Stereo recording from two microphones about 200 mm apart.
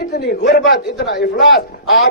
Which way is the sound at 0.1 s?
55° left (ahead or behind).